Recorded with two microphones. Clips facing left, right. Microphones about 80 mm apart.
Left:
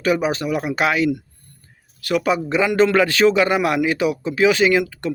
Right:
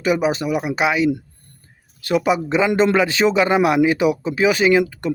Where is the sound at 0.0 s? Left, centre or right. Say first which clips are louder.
Right 1 dB; centre.